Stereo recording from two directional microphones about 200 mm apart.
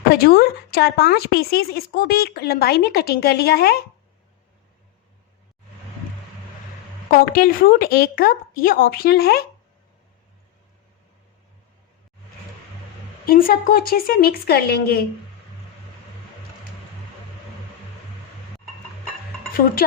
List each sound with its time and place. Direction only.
0.1 s speech: 50° left (ahead or behind)
7.1 s speech: 50° left (ahead or behind)
13.2 s speech: 45° left (ahead or behind)